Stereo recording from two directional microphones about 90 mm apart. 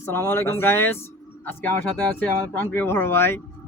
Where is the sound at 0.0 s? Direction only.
25° left (ahead or behind).